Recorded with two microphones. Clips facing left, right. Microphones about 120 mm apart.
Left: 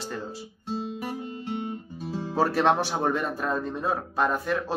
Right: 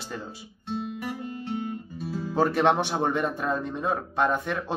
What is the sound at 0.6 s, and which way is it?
Guitar, 30° left (ahead or behind).